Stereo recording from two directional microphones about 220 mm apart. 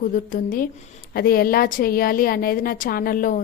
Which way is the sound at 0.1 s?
40° left (ahead or behind).